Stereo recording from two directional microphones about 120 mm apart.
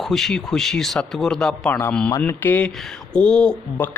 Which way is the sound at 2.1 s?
25° left (ahead or behind).